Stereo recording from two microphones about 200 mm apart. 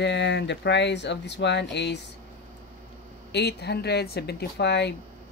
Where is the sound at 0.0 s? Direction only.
60° left (ahead or behind).